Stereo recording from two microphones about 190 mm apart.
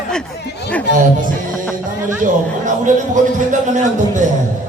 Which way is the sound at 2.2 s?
40° right (ahead or behind).